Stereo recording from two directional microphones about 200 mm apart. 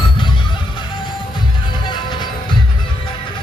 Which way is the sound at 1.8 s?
25° left (ahead or behind).